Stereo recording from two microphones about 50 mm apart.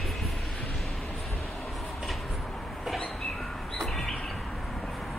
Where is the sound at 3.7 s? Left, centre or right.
Centre.